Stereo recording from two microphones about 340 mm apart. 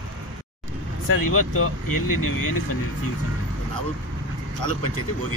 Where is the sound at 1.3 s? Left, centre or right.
Left.